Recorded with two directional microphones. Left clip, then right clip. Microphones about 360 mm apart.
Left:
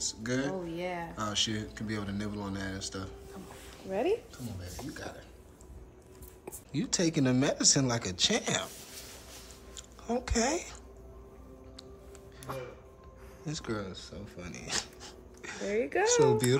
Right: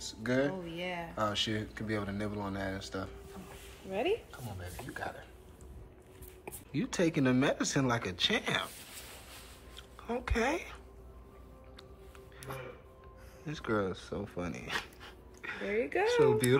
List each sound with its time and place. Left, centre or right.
0.0 s speech: centre
6.4 s speech: centre
9.8 s speech: centre
12.5 s speech: centre